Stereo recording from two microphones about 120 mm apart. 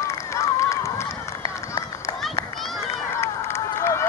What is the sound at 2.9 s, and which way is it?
Run, 20° left (ahead or behind).